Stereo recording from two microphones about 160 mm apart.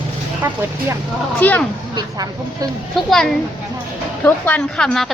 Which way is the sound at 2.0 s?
25° right (ahead or behind).